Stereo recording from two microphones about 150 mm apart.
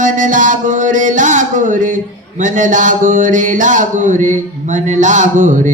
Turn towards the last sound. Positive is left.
turn(degrees=-55)  # may be behind; listen again after turning